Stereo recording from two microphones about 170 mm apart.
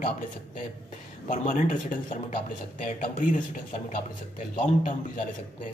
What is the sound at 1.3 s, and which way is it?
A man's voice, 45° left (ahead or behind).